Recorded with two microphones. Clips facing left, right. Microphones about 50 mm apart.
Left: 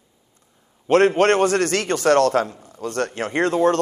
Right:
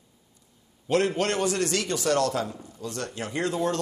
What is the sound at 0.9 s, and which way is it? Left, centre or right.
A man's voice, left.